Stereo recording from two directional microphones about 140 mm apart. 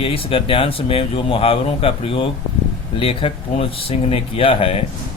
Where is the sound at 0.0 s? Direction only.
40° left (ahead or behind).